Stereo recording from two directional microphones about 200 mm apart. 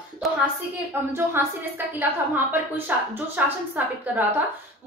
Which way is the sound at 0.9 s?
10° right (ahead or behind).